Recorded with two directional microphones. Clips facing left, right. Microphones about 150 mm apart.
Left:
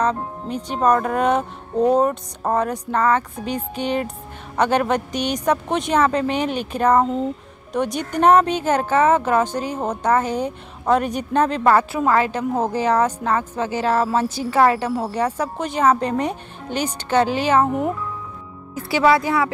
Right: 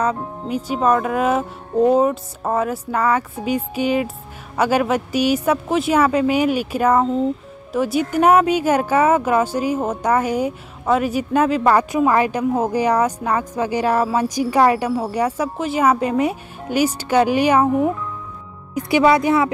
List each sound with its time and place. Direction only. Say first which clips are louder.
0.0 s speech: even; 10° right (ahead or behind)
18.8 s speech: right 2 dB; 20° right (ahead or behind)